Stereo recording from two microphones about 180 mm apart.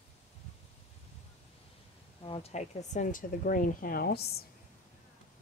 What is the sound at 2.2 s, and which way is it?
Speech, 30° left (ahead or behind).